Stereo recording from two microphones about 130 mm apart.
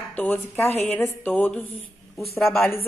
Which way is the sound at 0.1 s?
15° left (ahead or behind).